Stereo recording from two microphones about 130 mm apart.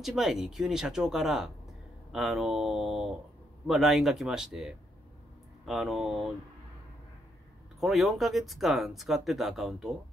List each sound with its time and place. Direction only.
0.0 s speech: 5° right (ahead or behind)
7.8 s speech: centre (ahead or behind)